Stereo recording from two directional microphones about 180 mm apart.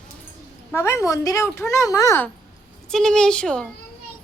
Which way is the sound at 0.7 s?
15° left (ahead or behind).